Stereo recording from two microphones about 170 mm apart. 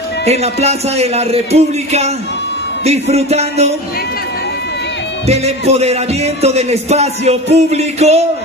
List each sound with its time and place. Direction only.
0.2 s music: 40° right (ahead or behind)
5.2 s music: 40° right (ahead or behind)